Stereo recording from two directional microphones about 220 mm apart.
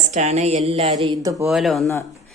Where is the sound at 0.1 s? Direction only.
30° right (ahead or behind); by 1.5 s 15° right (ahead or behind).